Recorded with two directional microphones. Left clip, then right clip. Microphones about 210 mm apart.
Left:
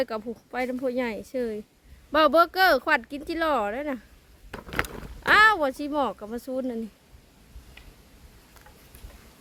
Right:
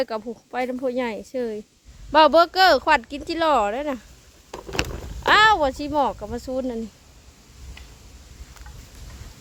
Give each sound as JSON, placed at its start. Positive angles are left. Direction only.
{"t": 0.0, "sound": "speech", "side_deg": 0}
{"t": 5.2, "sound": "speech", "side_deg": 0}